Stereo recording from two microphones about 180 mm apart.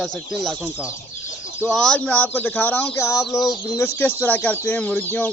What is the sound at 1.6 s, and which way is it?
Speech, 5° left (ahead or behind).